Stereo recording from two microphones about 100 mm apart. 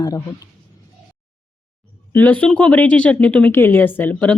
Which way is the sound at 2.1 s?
15° left (ahead or behind).